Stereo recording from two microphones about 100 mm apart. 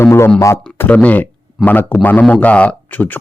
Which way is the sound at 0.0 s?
25° left (ahead or behind).